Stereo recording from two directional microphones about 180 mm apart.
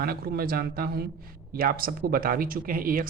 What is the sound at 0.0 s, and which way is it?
Speech, 55° right (ahead or behind).